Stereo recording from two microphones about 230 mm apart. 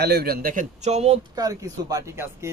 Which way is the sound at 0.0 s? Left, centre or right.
Right.